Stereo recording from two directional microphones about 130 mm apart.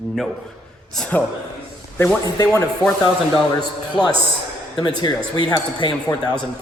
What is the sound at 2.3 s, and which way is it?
Speech, 30° left (ahead or behind).